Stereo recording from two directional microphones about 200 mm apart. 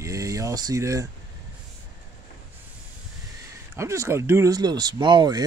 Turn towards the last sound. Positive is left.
turn(degrees=-20)  # may be behind; listen again after turning